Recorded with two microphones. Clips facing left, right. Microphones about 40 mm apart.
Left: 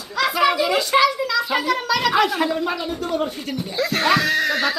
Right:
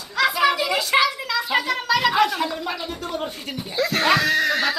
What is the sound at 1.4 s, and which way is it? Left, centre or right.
Speech, centre.